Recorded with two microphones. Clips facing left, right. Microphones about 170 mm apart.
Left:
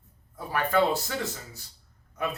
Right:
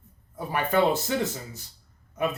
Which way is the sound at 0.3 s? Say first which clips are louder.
Right 1 dB; 20° right (ahead or behind).